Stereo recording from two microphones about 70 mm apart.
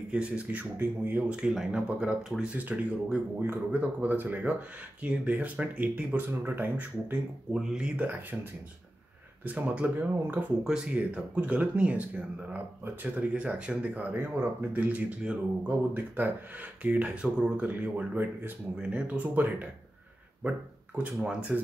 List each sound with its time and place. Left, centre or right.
0.1 s speech: centre
0.7 s speech: right
1.3 s speech: centre; by 7.2 s right
7.5 s speech: centre
8.1 s speech: right
9.4 s speech: right
16.8 s speech: centre
21.0 s speech: centre